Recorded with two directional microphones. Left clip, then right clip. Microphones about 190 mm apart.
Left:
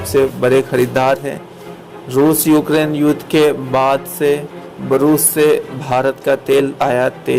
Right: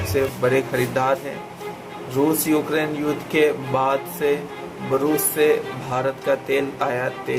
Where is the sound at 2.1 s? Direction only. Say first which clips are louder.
Left 8 dB; 45° left (ahead or behind).